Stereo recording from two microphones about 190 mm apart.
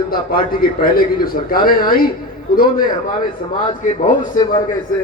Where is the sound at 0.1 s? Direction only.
50° left (ahead or behind).